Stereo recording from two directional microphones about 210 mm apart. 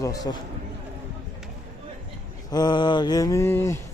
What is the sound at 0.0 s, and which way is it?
Speech, 15° left (ahead or behind).